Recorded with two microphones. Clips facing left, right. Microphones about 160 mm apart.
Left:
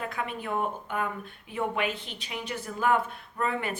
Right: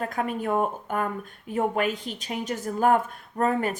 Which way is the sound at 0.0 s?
40° right (ahead or behind).